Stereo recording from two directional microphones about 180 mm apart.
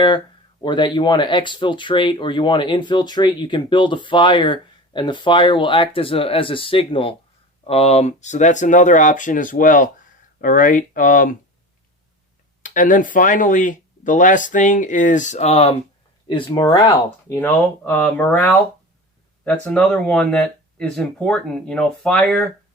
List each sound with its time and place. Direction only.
0.6 s speech: 25° left (ahead or behind); by 11.3 s 50° left (ahead or behind)
12.6 s speech: 45° left (ahead or behind)
16.2 s speech: 25° left (ahead or behind); by 18.5 s 10° left (ahead or behind)
19.6 s speech: 10° left (ahead or behind)